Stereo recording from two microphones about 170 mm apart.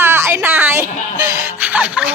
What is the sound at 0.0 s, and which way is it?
Music, 15° right (ahead or behind).